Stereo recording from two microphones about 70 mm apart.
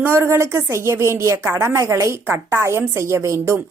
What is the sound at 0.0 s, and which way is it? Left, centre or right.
A woman's voice, right.